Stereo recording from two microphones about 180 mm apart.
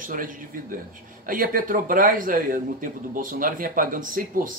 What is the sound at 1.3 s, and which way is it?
A man's voice, 50° right (ahead or behind).